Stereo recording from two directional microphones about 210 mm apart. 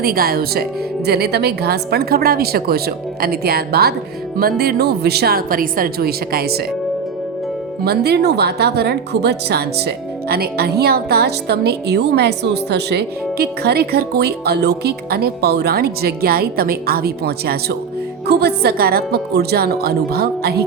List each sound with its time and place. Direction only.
0.0 s speech: 45° right (ahead or behind)
7.9 s speech: 50° right (ahead or behind)